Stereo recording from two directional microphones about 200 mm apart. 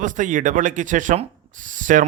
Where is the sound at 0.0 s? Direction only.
40° right (ahead or behind).